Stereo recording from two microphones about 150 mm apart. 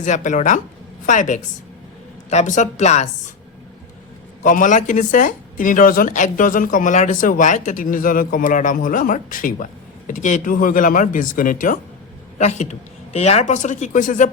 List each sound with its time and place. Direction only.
0.0 s speech: 55° left (ahead or behind)
4.4 s speech: 60° left (ahead or behind)
12.4 s speech: 50° left (ahead or behind)